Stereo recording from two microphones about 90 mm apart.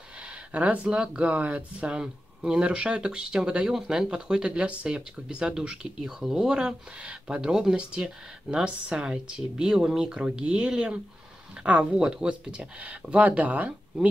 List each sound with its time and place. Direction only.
0.2 s speech: 15° right (ahead or behind)